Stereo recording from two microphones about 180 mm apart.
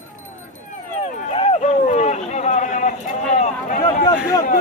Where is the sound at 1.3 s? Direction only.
35° left (ahead or behind).